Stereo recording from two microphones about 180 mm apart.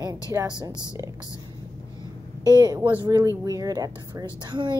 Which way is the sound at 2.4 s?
25° right (ahead or behind).